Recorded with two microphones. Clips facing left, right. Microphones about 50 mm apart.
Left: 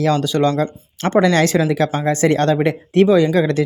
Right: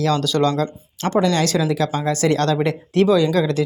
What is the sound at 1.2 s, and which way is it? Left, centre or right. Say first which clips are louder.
Speech: left 4 dB; left.